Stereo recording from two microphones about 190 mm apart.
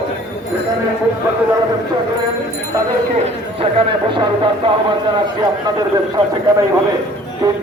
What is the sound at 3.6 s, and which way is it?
A man's voice, 25° right (ahead or behind).